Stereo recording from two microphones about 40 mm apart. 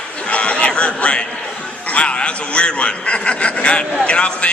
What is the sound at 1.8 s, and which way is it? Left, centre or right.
A man's voice, left.